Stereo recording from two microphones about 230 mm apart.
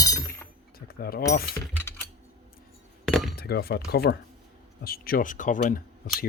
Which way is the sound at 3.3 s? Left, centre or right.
Left.